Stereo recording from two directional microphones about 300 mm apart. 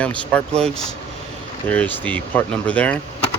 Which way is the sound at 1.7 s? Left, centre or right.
Centre.